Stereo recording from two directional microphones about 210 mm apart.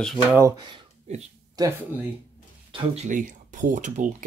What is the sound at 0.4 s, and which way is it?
Speech, 15° right (ahead or behind).